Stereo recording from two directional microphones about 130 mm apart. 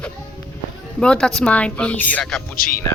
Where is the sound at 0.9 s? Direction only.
5° left (ahead or behind).